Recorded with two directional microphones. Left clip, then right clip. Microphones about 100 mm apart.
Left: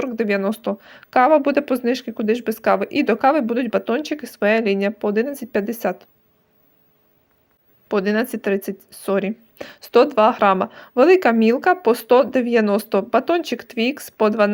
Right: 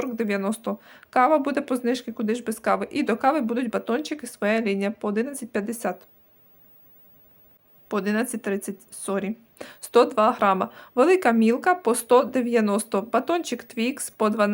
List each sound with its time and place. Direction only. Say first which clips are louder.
0.0 s speech: left 6 dB; 25° left (ahead or behind)
7.9 s speech: left 6 dB; 30° left (ahead or behind)